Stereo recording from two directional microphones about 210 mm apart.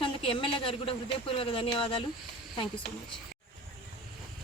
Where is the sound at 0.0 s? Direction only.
25° left (ahead or behind).